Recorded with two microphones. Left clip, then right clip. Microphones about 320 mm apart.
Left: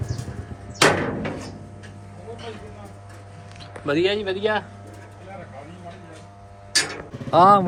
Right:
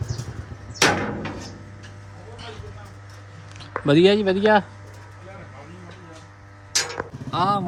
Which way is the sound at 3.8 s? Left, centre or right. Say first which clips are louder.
Right 5 dB; right.